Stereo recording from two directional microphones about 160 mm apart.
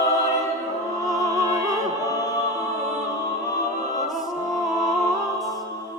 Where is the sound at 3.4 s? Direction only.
20° left (ahead or behind).